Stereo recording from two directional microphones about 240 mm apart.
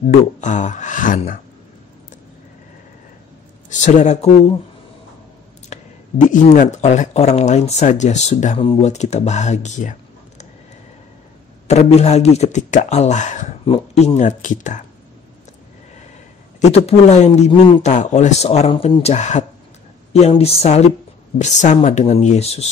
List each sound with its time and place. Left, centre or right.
0.1 s speech: left
3.8 s speech: left
5.7 s speech: left
11.6 s speech: left
16.6 s speech: left